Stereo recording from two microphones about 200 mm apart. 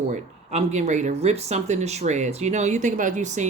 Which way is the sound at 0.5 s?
35° right (ahead or behind).